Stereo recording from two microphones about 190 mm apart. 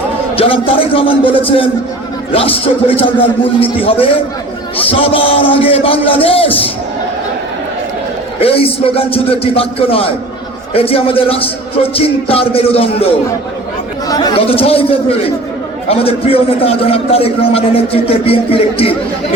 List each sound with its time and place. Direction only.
0.3 s speech: 30° left (ahead or behind)
8.4 s a man's voice: 30° left (ahead or behind)